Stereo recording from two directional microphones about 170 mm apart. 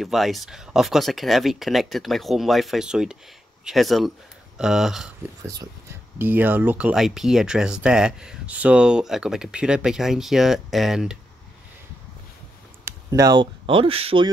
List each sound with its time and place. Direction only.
0.0 s speech: centre (ahead or behind)
5.4 s speech: 20° right (ahead or behind); by 11.1 s centre (ahead or behind)
12.8 s speech: 20° right (ahead or behind)